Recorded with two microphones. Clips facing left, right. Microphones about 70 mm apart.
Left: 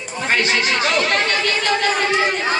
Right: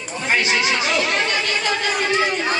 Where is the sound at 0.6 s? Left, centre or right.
Left.